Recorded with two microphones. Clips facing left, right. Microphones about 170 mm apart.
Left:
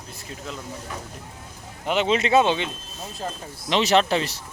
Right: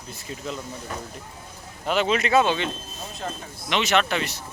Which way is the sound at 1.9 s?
20° left (ahead or behind).